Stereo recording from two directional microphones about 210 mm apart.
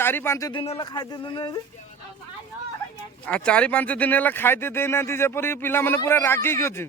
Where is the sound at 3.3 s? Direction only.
5° left (ahead or behind).